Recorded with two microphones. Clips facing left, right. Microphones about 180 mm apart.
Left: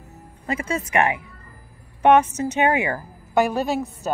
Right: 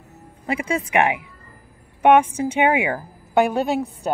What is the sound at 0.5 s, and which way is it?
A woman's voice, 15° right (ahead or behind).